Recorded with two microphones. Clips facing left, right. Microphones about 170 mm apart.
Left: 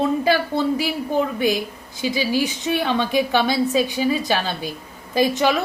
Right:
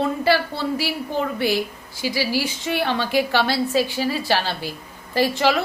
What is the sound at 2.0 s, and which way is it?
A woman's voice, 20° left (ahead or behind).